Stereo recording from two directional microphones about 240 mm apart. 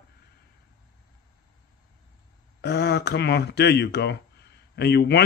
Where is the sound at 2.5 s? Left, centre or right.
Left.